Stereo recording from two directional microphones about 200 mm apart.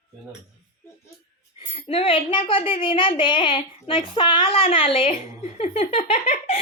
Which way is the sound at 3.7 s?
25° left (ahead or behind).